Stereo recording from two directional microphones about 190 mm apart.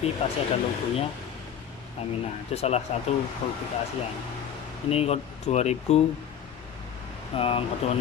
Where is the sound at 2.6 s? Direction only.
35° left (ahead or behind).